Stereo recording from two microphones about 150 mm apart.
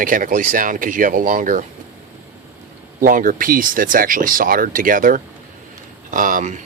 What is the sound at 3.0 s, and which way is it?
Speech, 65° right (ahead or behind).